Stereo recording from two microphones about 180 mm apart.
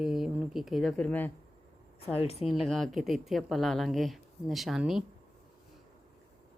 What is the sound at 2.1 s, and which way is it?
Speech, 35° left (ahead or behind).